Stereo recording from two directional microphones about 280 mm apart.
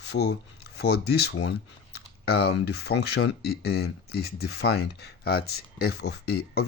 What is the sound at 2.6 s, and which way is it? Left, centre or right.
Speech, left.